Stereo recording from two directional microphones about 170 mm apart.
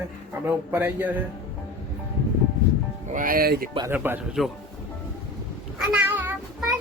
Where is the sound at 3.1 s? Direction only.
55° right (ahead or behind).